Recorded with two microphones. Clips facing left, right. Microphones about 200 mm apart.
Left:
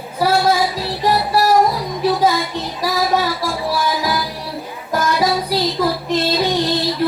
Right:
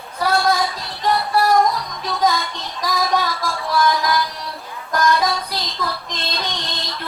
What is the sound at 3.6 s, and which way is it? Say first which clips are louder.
Music: right 2 dB; 10° left (ahead or behind).